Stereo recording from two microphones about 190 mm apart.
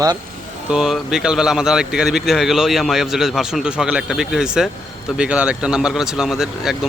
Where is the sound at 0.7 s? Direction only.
5° right (ahead or behind).